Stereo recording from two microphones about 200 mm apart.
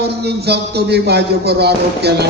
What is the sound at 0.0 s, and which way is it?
A man's voice, 55° right (ahead or behind).